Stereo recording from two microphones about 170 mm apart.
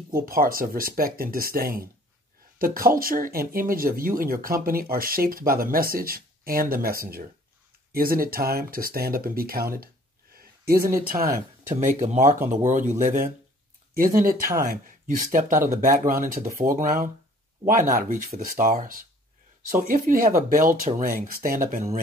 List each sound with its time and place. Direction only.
0.1 s speech: 55° right (ahead or behind)
10.3 s a sound: 60° right (ahead or behind)
11.1 s speech: 60° right (ahead or behind)
11.7 s speech: 45° right (ahead or behind)